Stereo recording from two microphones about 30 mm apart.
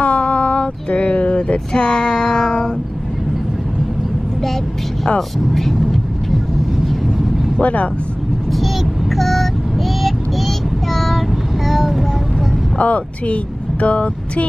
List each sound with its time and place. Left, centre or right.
0.0 s a sound: left
1.7 s child singing: left
5.5 s speech: centre
5.8 s vehicle: centre
7.6 s speech: left
9.1 s vehicle: centre
10.0 s child singing: centre
12.7 s speech: left